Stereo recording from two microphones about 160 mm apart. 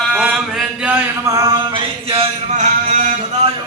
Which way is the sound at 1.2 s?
20° right (ahead or behind).